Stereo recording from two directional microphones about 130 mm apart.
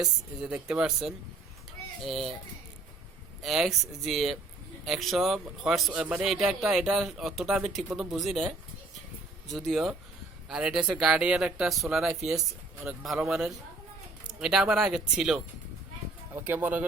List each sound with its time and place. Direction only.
0.0 s a man's voice: 5° right (ahead or behind)
3.4 s a man's voice: centre (ahead or behind)
16.3 s speech: 15° right (ahead or behind)